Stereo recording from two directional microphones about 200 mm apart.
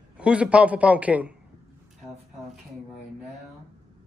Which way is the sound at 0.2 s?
5° right (ahead or behind).